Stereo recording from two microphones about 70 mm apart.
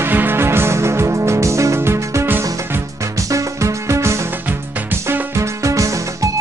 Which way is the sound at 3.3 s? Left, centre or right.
Right.